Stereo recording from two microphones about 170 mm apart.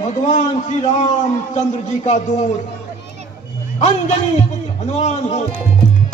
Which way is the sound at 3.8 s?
40° left (ahead or behind).